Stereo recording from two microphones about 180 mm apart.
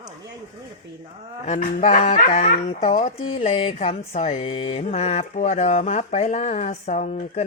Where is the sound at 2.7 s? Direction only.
35° left (ahead or behind).